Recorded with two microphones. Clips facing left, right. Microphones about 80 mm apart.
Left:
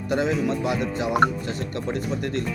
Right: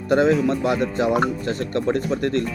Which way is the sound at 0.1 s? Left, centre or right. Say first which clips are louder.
Right 6 dB; right.